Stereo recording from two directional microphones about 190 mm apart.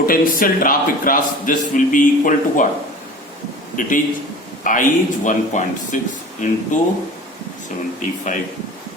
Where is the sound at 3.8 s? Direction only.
45° left (ahead or behind).